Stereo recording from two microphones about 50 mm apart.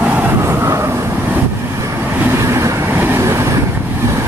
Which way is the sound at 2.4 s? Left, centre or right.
Right.